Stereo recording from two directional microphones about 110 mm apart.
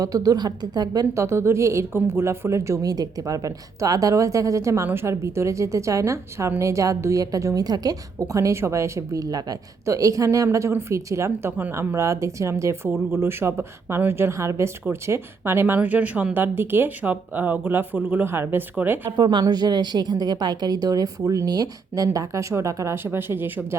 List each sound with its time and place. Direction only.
0.0 s a woman's voice: 35° right (ahead or behind); by 19.1 s 15° right (ahead or behind)
19.1 s a woman's voice: 40° right (ahead or behind); by 23.6 s 20° right (ahead or behind)